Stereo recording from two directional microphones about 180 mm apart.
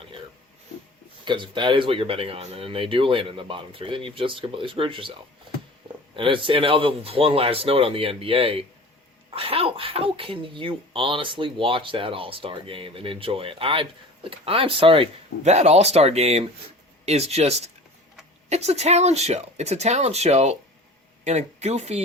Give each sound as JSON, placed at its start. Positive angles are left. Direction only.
{"t": 1.2, "sound": "speech", "side_deg": -25}
{"t": 6.1, "sound": "speech", "side_deg": -30}